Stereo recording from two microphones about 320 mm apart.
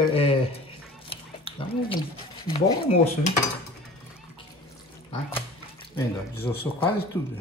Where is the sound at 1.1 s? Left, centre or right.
Centre.